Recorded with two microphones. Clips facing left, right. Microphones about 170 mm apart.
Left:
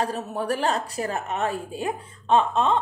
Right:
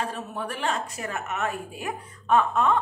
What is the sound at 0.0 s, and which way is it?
A woman's voice, 40° left (ahead or behind).